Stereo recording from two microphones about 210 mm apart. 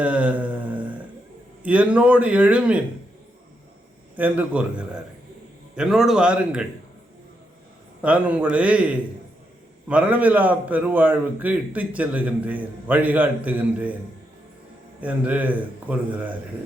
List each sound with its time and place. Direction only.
0.0 s mantra: 5° right (ahead or behind)
1.6 s a man's voice: 5° right (ahead or behind)
4.1 s a man's voice: 10° right (ahead or behind)
8.0 s a man's voice: 5° right (ahead or behind)
15.0 s a man's voice: 5° right (ahead or behind)